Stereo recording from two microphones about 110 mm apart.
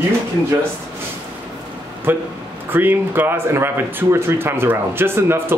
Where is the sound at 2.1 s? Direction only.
20° right (ahead or behind).